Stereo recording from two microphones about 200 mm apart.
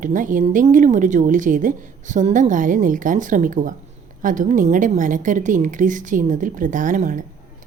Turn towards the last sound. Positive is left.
turn(degrees=-40)  # may be behind; listen again after turning